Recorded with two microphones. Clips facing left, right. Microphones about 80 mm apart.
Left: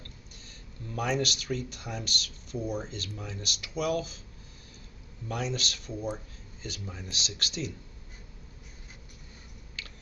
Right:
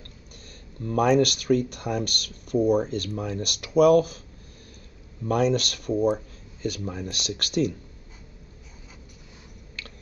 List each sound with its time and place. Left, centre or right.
0.8 s speech: right
5.2 s speech: right
9.8 s chewing: right